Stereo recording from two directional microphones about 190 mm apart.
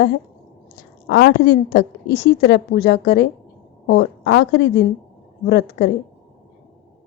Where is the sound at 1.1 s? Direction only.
60° left (ahead or behind).